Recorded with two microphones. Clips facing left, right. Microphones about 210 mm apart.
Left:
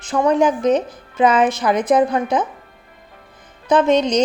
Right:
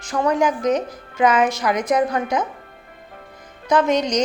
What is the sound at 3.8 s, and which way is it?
Speech, 25° left (ahead or behind).